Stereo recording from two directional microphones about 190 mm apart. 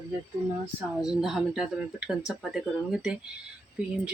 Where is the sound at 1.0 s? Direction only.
Centre (ahead or behind).